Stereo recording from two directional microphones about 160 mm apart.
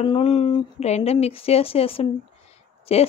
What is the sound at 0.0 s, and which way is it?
A woman's voice, 35° left (ahead or behind).